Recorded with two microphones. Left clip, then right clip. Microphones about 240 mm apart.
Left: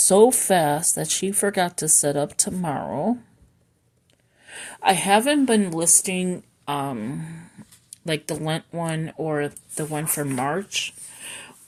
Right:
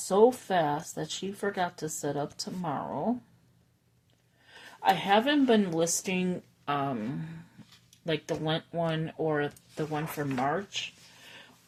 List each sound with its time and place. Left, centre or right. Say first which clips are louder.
0.1 s speech: left 7 dB; left
4.4 s a woman's voice: left 6 dB; left